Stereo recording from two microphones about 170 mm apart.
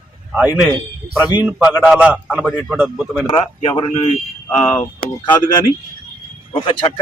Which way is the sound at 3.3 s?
30° left (ahead or behind).